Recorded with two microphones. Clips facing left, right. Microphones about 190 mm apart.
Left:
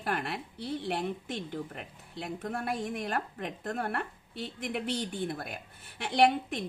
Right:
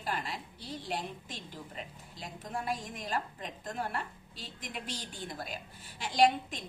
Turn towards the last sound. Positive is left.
turn(degrees=60)  # may be behind; listen again after turning